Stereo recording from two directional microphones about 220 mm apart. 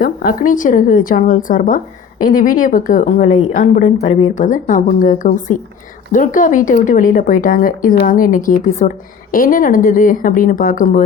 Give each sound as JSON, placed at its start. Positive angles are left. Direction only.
{"t": 0.0, "sound": "speech", "side_deg": 40}